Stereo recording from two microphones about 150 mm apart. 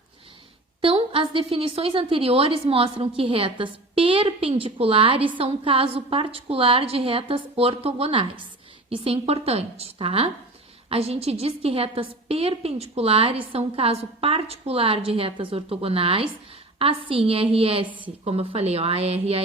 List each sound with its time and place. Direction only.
0.8 s a woman's voice: 35° right (ahead or behind)